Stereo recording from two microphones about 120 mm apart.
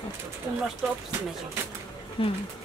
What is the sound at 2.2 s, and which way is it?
Speech, 50° left (ahead or behind).